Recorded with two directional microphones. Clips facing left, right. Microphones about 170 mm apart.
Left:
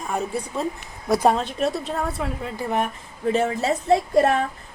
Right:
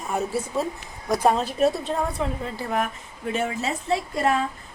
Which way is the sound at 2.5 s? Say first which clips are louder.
Left 3 dB; 25° left (ahead or behind).